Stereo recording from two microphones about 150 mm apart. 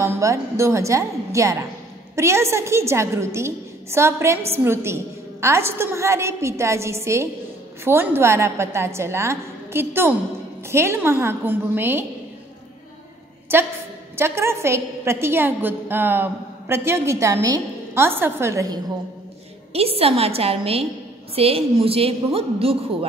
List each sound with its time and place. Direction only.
0.0 s a woman's voice: 20° right (ahead or behind)
13.5 s a woman's voice: 15° right (ahead or behind)
19.7 s a woman's voice: 40° right (ahead or behind)